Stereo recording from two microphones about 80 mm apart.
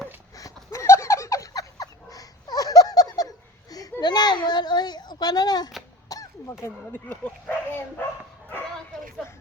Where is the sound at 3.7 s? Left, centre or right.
Left.